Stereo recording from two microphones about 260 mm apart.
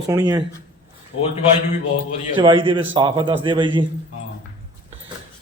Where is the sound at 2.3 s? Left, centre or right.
Centre.